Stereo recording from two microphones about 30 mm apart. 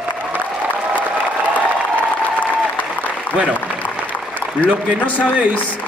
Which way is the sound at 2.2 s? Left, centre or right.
Left.